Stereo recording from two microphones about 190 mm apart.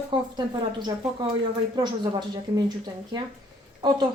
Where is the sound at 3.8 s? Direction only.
25° right (ahead or behind).